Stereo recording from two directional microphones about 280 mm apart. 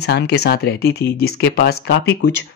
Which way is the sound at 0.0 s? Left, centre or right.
Left.